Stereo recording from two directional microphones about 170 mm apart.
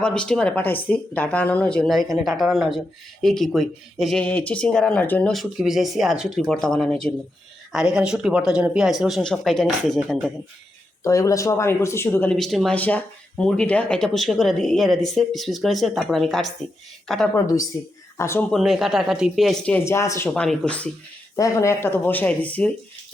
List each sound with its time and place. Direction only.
0.0 s speech: 5° left (ahead or behind)
11.0 s speech: 20° left (ahead or behind); by 16.5 s centre (ahead or behind)
17.3 s speech: 20° left (ahead or behind)
18.5 s speech: centre (ahead or behind)
21.3 s speech: 20° left (ahead or behind)